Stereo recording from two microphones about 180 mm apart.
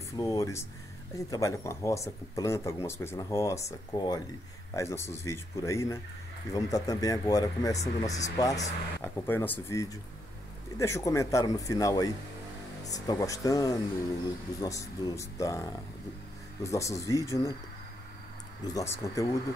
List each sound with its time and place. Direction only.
0.2 s speech: 15° left (ahead or behind)
18.7 s speech: 20° left (ahead or behind)